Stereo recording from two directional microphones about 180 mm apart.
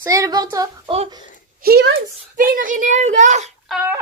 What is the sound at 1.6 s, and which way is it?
Speech, 65° right (ahead or behind).